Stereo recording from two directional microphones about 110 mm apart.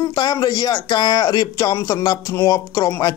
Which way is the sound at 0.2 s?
35° left (ahead or behind).